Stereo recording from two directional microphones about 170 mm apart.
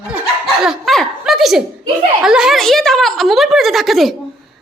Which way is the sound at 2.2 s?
5° right (ahead or behind).